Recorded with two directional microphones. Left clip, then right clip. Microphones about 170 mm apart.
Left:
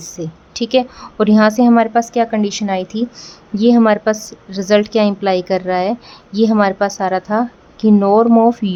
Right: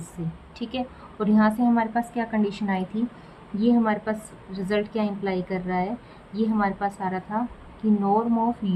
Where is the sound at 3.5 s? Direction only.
85° left.